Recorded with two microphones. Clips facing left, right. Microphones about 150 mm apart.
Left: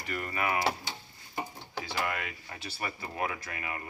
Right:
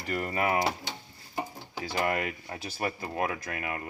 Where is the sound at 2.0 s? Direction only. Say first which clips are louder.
Right 6 dB; 40° right (ahead or behind).